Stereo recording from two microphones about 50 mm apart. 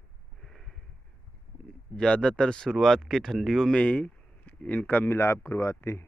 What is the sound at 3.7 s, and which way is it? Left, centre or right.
Speech, left.